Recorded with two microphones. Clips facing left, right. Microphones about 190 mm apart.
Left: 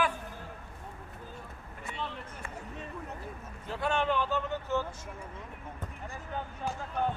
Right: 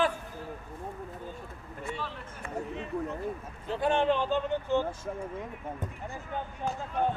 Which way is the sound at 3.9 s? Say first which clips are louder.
Right 3 dB; 20° right (ahead or behind).